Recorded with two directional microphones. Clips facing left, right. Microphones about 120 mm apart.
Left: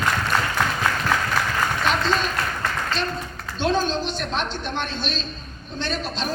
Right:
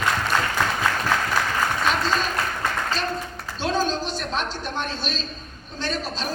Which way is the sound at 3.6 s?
40° right (ahead or behind).